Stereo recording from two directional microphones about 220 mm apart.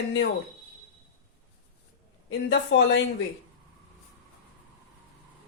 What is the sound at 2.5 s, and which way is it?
Speech, 50° left (ahead or behind).